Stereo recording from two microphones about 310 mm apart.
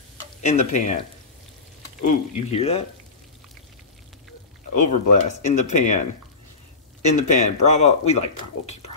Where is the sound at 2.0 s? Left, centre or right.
Centre.